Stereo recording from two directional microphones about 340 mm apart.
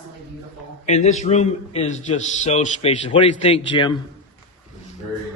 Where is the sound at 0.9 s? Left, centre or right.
Centre.